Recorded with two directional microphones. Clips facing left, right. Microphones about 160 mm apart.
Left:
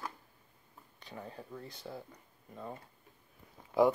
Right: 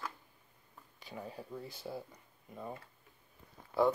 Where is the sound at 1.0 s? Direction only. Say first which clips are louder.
Right 1 dB; 5° right (ahead or behind).